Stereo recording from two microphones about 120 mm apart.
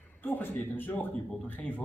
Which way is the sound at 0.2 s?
15° left (ahead or behind).